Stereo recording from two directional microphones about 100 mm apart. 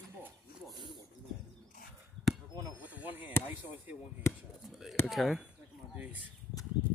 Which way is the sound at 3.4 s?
15° right (ahead or behind).